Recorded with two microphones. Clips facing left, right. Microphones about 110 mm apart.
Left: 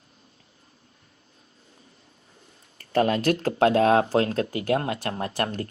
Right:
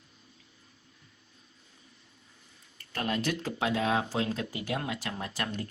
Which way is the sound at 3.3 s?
45° left (ahead or behind).